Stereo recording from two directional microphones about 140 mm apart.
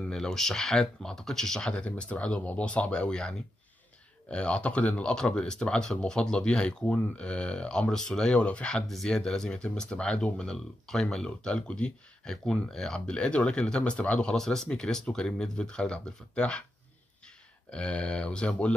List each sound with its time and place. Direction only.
0.0 s speech: 5° left (ahead or behind)
17.6 s speech: 10° left (ahead or behind)